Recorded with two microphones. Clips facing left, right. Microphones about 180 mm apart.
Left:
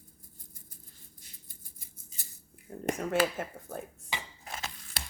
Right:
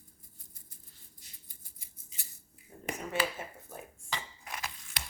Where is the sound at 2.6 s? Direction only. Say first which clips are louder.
Left 7 dB; 55° left (ahead or behind).